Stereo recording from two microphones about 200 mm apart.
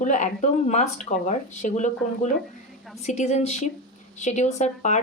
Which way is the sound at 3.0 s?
35° left (ahead or behind).